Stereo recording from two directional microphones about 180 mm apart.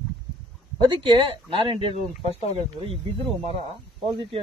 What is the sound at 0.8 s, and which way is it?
A man's voice, 25° right (ahead or behind).